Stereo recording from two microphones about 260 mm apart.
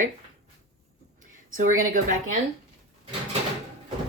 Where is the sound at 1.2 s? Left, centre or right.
Right.